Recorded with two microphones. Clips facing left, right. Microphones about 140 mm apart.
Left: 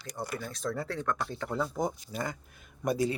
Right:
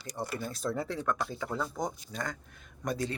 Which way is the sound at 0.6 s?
5° right (ahead or behind).